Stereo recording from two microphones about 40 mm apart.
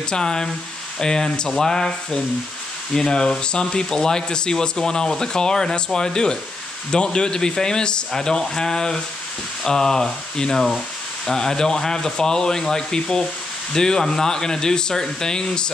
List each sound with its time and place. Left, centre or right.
0.1 s a man's voice: centre